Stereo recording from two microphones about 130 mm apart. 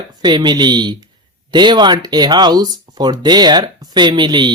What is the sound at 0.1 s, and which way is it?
Speech, 35° right (ahead or behind).